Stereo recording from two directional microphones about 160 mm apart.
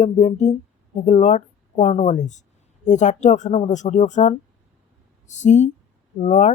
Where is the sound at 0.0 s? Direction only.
50° left (ahead or behind).